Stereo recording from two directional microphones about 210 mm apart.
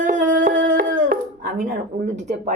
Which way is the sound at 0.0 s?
40° right (ahead or behind).